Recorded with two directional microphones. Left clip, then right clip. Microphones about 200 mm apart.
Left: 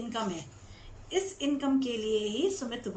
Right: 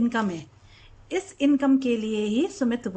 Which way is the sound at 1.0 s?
55° right (ahead or behind).